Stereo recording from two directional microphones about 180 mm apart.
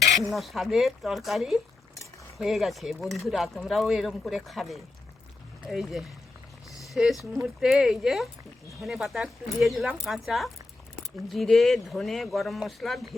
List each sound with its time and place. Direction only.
0.3 s speech: centre (ahead or behind)